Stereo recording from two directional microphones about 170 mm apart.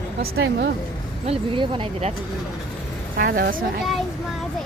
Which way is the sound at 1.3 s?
30° right (ahead or behind).